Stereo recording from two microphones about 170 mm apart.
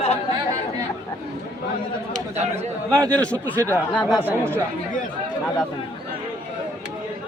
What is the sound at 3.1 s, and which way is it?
Speech, 10° left (ahead or behind).